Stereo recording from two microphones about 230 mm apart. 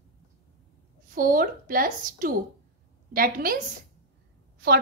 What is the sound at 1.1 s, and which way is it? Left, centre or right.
A woman's voice, right.